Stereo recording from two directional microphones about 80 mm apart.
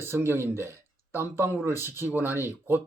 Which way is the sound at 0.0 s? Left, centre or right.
Right.